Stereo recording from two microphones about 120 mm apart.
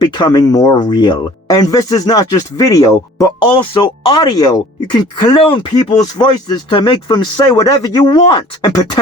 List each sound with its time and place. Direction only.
0.0 s speech: 40° left (ahead or behind)